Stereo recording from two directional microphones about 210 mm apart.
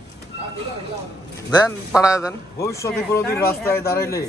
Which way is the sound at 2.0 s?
15° left (ahead or behind).